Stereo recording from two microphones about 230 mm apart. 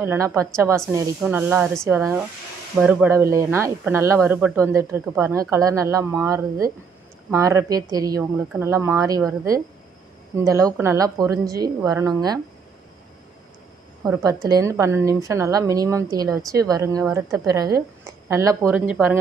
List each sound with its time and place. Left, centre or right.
0.0 s a woman's voice: centre
10.3 s a woman's voice: centre
14.1 s a woman's voice: centre